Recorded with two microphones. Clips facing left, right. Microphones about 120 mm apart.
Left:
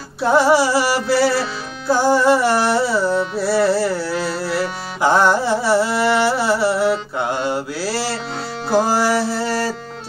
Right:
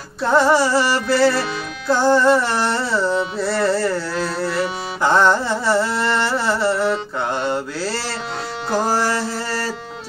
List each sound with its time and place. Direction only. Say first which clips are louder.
0.2 s carnatic music: left 1 dB; 10° left (ahead or behind)
8.6 s music: left 3 dB; 10° left (ahead or behind)